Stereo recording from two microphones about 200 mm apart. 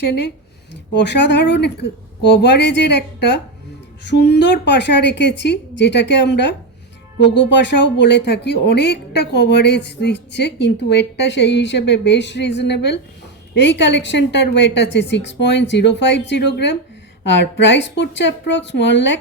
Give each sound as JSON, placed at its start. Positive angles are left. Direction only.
{"t": 0.9, "sound": "speech", "side_deg": 60}